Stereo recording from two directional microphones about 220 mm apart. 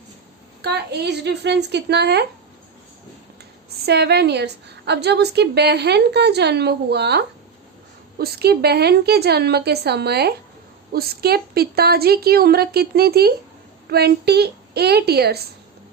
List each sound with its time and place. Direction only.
0.6 s a woman's voice: 50° right (ahead or behind)
3.8 s a woman's voice: 50° right (ahead or behind)